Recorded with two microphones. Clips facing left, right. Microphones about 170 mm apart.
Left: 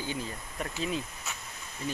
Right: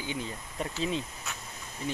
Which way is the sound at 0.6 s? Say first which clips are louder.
Right 2 dB; 25° right (ahead or behind).